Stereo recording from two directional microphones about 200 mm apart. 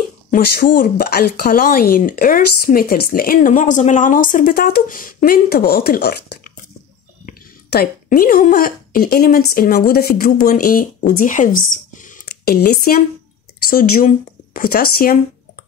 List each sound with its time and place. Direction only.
0.3 s speech: 45° left (ahead or behind)